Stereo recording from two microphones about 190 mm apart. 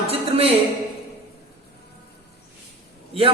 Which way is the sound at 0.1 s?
30° right (ahead or behind).